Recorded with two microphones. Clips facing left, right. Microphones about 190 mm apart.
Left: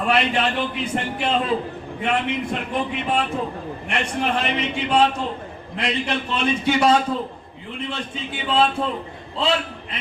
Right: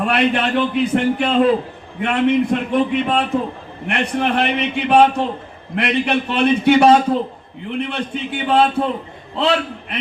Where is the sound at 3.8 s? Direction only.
60° right (ahead or behind).